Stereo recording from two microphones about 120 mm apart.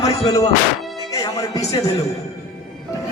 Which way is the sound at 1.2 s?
30° left (ahead or behind).